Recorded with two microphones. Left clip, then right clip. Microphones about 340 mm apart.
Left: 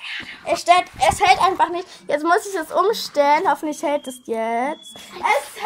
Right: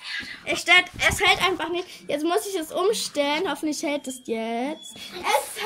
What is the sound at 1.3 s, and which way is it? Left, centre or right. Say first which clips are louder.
Speech: left 6 dB; left.